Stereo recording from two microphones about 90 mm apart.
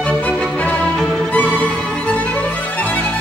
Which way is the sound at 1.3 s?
15° left (ahead or behind).